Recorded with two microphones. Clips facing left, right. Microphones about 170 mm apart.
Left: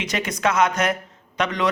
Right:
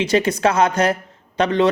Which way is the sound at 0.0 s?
30° right (ahead or behind).